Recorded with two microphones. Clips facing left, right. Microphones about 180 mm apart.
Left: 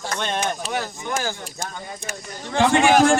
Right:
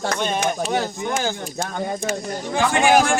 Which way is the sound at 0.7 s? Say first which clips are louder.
Right 4 dB; 25° right (ahead or behind).